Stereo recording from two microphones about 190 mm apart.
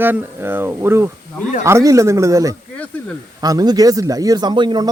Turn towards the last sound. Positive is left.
turn(degrees=-25)  # may be behind; listen again after turning